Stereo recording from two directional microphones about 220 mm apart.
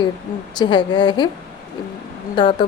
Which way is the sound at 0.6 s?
20° left (ahead or behind).